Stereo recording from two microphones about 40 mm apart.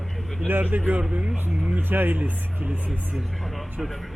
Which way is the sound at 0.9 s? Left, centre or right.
Right.